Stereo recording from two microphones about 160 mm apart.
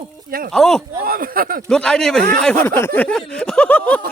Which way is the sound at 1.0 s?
65° right (ahead or behind).